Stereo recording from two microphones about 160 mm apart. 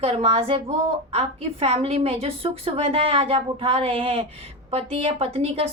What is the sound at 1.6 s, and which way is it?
A woman's voice, 40° right (ahead or behind).